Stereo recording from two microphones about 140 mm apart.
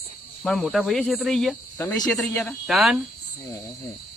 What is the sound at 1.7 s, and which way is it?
Speech, 20° left (ahead or behind).